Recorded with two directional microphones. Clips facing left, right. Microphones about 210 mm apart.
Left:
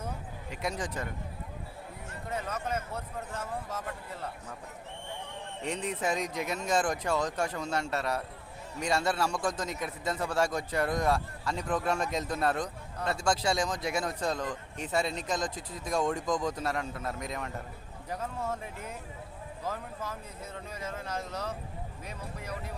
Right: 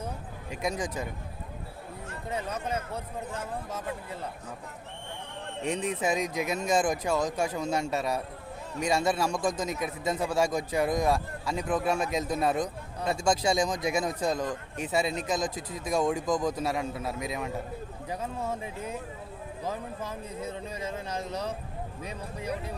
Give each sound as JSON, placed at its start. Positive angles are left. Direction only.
{"t": 0.5, "sound": "speech", "side_deg": -15}
{"t": 3.4, "sound": "speech", "side_deg": -10}
{"t": 5.8, "sound": "speech", "side_deg": -10}